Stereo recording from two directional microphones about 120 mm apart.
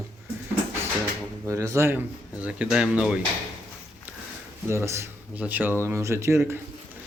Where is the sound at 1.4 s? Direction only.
25° right (ahead or behind); by 3.2 s 10° right (ahead or behind).